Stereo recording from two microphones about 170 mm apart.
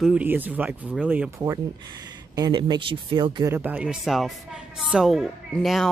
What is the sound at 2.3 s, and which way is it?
Speech, 25° right (ahead or behind).